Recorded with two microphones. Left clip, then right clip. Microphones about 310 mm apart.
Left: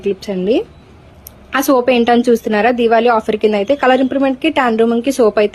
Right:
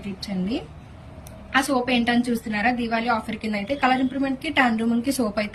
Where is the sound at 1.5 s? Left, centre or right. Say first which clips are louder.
Left 10 dB; centre.